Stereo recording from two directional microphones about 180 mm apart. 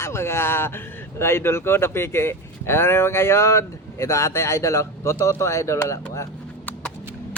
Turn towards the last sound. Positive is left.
turn(degrees=10)  # may be behind; listen again after turning